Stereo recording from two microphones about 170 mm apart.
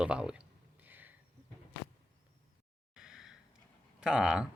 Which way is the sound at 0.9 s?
10° right (ahead or behind).